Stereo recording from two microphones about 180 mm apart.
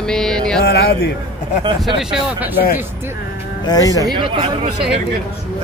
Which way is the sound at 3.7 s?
20° left (ahead or behind).